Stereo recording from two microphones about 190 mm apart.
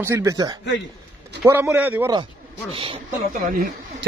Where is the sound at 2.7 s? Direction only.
25° right (ahead or behind).